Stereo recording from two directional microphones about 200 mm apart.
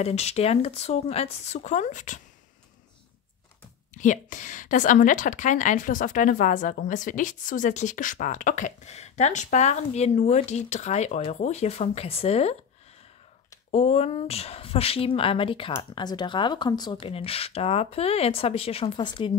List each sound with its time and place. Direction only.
0.0 s a woman's voice: 30° left (ahead or behind)
4.0 s a woman's voice: 40° left (ahead or behind)
13.7 s speech: 30° left (ahead or behind)